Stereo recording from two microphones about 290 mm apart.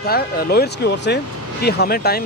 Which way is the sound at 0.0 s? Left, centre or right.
Left.